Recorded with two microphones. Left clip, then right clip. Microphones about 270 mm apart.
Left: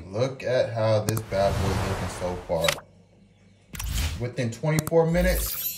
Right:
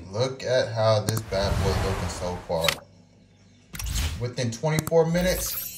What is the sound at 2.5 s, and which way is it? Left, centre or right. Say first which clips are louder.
Speech: even; centre.